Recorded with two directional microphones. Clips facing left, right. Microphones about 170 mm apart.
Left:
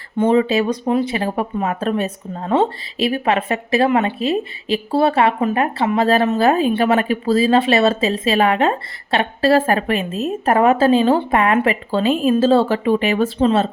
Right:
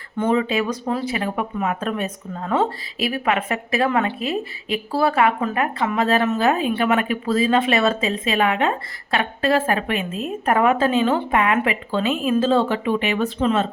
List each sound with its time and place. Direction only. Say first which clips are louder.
0.2 s speech: left 5 dB; 30° left (ahead or behind)